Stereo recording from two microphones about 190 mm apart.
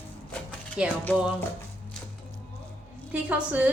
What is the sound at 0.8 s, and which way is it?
Speech, 5° right (ahead or behind).